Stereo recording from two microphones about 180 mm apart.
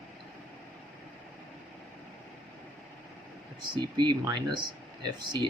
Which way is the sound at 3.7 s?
25° right (ahead or behind).